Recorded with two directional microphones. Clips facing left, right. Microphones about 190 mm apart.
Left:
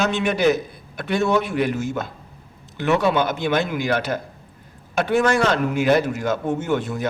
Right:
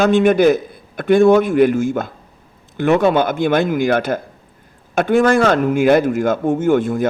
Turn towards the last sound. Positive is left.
turn(degrees=-50)  # may be behind; listen again after turning